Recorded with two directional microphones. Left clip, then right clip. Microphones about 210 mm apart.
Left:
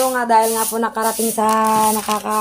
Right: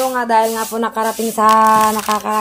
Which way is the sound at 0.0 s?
5° right (ahead or behind).